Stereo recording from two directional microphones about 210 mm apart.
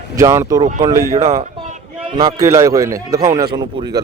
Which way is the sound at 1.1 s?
30° right (ahead or behind).